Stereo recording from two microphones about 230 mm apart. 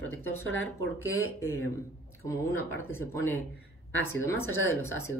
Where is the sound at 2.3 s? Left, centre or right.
Centre.